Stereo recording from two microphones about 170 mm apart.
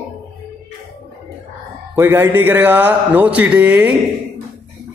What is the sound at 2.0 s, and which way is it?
A man's voice, 10° right (ahead or behind).